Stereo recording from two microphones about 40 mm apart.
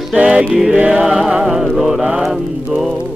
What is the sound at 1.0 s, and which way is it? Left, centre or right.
Music, centre.